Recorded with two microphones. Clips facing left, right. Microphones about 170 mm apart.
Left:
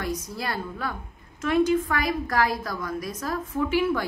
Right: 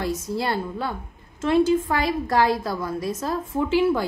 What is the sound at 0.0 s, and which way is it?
A woman's voice, 25° right (ahead or behind).